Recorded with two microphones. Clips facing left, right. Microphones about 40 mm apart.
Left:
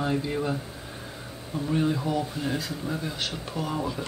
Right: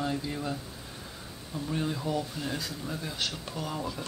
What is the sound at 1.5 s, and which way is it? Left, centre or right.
Speech, centre.